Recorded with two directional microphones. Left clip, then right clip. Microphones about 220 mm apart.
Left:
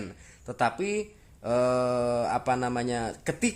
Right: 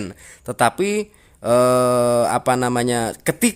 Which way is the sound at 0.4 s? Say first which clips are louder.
Right 9 dB; 40° right (ahead or behind).